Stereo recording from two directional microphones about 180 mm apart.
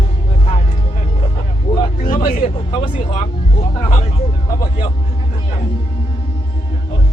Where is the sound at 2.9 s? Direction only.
30° left (ahead or behind).